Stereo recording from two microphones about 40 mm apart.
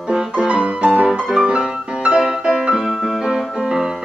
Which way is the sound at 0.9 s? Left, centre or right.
Right.